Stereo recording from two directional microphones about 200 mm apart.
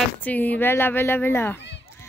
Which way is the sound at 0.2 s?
10° left (ahead or behind).